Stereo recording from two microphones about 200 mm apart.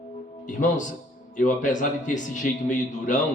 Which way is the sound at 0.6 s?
40° left (ahead or behind).